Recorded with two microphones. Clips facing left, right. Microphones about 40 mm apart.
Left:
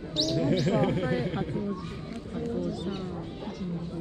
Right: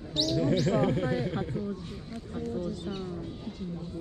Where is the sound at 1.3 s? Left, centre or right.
Left.